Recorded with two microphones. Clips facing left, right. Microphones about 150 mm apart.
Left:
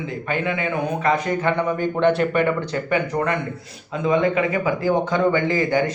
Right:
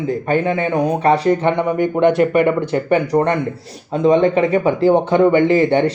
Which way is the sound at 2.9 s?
35° right (ahead or behind).